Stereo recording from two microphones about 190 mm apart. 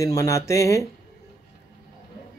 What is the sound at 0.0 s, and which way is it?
Speech, 15° left (ahead or behind).